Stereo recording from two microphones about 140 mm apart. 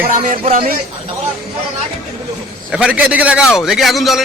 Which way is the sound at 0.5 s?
90° right.